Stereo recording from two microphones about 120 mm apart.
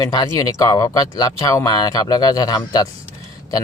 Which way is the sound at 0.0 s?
30° left (ahead or behind).